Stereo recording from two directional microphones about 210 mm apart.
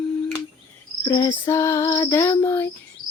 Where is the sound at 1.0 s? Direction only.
20° left (ahead or behind).